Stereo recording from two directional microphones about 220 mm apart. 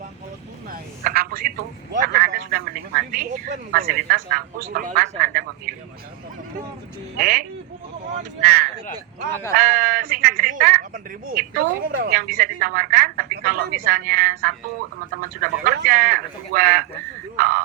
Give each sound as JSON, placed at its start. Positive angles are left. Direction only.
{"t": 0.7, "sound": "speech", "side_deg": -40}
{"t": 7.2, "sound": "speech", "side_deg": -40}
{"t": 15.6, "sound": "speech", "side_deg": -40}